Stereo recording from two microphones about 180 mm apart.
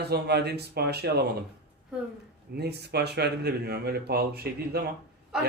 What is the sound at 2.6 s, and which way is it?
Speech, 65° right (ahead or behind).